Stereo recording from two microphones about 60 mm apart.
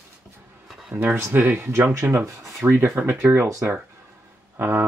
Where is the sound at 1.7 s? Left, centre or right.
Right.